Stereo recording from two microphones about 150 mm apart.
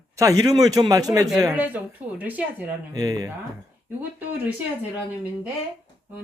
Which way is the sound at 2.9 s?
25° right (ahead or behind).